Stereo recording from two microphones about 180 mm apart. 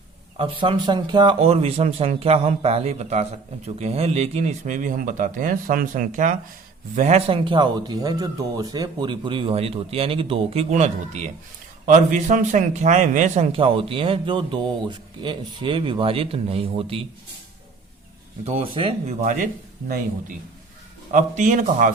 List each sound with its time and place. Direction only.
0.3 s a man's voice: 30° right (ahead or behind)
18.4 s a man's voice: 30° right (ahead or behind)
19.2 s a man's voice: 45° right (ahead or behind)
21.1 s a man's voice: 45° right (ahead or behind)